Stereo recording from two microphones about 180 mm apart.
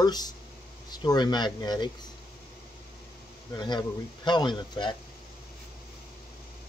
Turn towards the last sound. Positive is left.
turn(degrees=25)  # may be behind; listen again after turning